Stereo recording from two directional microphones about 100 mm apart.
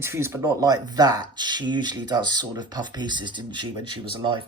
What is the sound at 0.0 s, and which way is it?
Speech, 25° right (ahead or behind).